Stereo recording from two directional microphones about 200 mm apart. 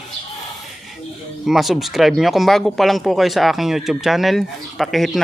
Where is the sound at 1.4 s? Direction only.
Centre (ahead or behind).